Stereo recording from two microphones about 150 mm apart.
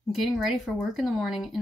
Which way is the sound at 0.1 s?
Centre (ahead or behind).